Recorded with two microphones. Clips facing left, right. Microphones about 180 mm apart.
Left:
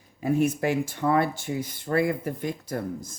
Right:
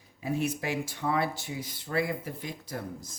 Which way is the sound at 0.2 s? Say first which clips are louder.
Left 7 dB; 50° left (ahead or behind).